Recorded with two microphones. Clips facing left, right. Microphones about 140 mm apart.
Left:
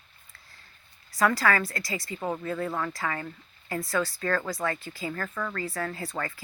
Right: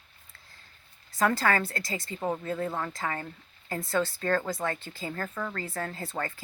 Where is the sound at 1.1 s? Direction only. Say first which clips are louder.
Left 1 dB; 25° right (ahead or behind).